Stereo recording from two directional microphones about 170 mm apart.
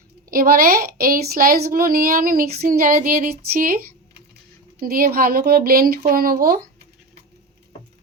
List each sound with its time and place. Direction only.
0.3 s a woman's voice: 60° right (ahead or behind)
4.8 s a woman's voice: 60° right (ahead or behind)